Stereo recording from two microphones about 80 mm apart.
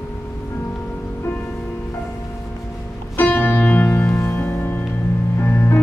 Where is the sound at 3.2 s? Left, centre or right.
Left.